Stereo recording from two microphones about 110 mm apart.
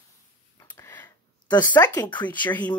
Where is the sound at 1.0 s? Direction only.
40° left (ahead or behind).